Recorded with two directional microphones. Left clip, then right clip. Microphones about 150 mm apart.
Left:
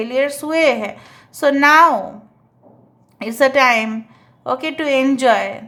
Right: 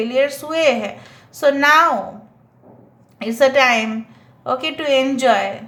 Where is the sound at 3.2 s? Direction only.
30° left (ahead or behind).